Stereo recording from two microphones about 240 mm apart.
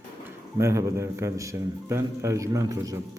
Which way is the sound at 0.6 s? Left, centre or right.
Centre.